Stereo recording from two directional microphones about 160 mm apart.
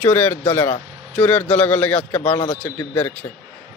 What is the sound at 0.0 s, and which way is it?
A man's voice, 10° left (ahead or behind).